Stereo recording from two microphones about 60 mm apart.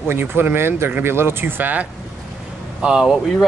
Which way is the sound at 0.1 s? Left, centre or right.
Right.